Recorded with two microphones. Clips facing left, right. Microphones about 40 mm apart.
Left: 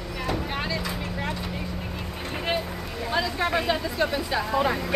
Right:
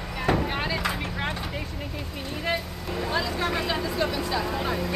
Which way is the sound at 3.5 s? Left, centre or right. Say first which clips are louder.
Left 2 dB; centre.